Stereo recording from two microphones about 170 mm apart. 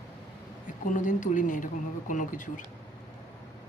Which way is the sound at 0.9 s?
50° left (ahead or behind).